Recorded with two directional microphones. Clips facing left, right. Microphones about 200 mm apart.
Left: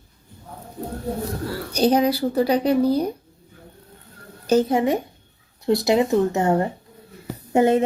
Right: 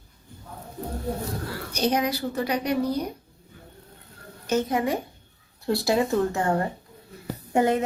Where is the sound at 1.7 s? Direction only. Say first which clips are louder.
Left 6 dB; 30° left (ahead or behind).